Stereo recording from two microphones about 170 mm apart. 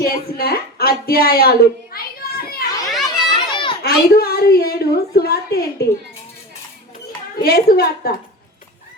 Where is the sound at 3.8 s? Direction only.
65° left (ahead or behind).